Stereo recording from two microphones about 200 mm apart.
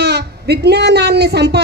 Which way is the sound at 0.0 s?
55° right (ahead or behind).